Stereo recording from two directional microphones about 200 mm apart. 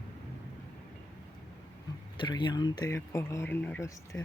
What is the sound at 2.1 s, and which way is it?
Speech, 25° left (ahead or behind).